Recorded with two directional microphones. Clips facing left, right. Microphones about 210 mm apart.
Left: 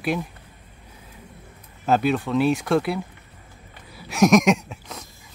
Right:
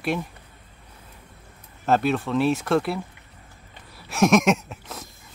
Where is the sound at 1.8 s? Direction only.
Centre (ahead or behind).